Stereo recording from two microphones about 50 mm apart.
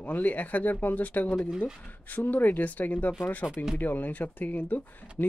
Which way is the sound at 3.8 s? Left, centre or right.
Left.